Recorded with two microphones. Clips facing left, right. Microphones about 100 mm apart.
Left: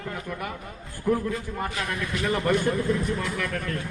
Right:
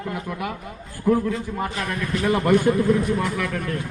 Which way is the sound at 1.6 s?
35° right (ahead or behind).